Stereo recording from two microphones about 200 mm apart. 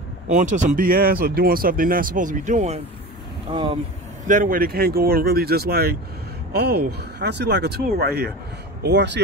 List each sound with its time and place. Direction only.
0.3 s speech: 40° right (ahead or behind)
3.4 s speech: 25° right (ahead or behind)
4.3 s speech: 40° right (ahead or behind); by 9.2 s 60° right (ahead or behind)